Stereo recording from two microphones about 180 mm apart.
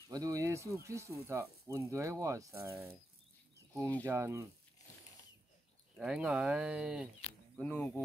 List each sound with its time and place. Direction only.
0.1 s speech: 20° right (ahead or behind)
4.0 s speech: 15° right (ahead or behind)
5.9 s speech: 5° right (ahead or behind)
7.5 s speech: 10° left (ahead or behind)